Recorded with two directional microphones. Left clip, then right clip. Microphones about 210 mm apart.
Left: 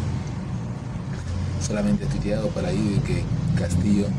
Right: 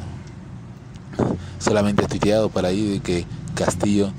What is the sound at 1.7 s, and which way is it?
Speech, 45° right (ahead or behind).